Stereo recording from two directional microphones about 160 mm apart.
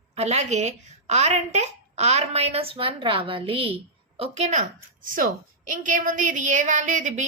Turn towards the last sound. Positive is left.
turn(degrees=-50)  # may be behind; listen again after turning